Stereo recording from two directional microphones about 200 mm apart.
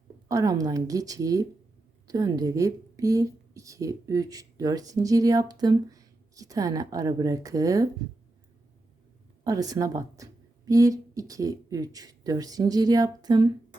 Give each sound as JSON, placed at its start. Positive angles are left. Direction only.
{"t": 0.3, "sound": "speech", "side_deg": -15}
{"t": 9.4, "sound": "speech", "side_deg": -15}